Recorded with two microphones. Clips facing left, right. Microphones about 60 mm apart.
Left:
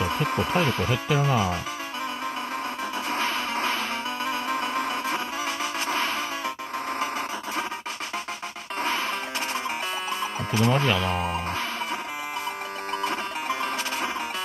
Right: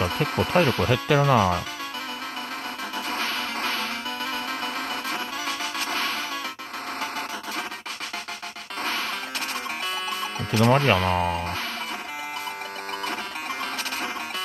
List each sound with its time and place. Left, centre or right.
0.5 s speech: right
3.1 s music: left
7.0 s vehicle: left
10.5 s speech: right